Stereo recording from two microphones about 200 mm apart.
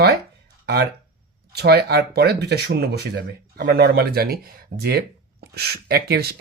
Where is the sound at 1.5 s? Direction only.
55° right (ahead or behind).